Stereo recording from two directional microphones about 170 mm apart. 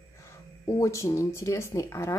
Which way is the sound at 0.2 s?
15° left (ahead or behind).